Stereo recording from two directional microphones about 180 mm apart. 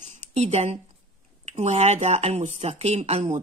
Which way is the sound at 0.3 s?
35° right (ahead or behind).